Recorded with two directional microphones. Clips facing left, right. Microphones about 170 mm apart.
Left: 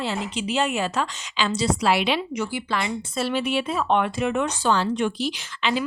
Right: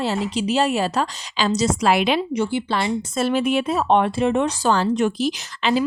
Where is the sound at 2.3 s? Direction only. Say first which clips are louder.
Right 5 dB; 30° right (ahead or behind).